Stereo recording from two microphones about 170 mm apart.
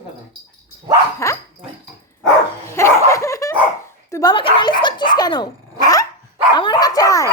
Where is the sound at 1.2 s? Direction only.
15° left (ahead or behind).